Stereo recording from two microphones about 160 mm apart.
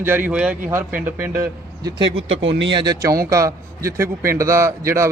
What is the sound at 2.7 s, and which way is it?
A man's voice, 25° right (ahead or behind).